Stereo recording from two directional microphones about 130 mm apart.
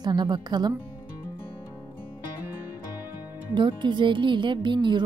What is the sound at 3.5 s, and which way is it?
Speech, 35° right (ahead or behind).